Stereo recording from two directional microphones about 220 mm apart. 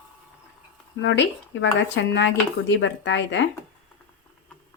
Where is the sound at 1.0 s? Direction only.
55° left (ahead or behind).